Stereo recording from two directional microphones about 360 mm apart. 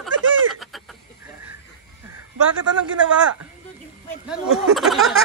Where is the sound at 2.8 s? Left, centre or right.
Right.